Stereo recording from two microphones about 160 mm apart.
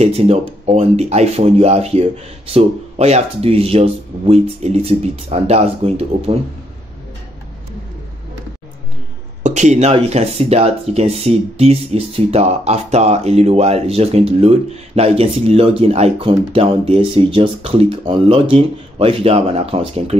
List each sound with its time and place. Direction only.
0.0 s speech: 40° right (ahead or behind)
9.4 s speech: 45° right (ahead or behind)